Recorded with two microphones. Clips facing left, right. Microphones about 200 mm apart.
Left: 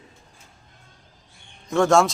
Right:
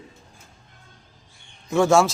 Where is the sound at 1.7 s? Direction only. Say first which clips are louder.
Even; 5° right (ahead or behind).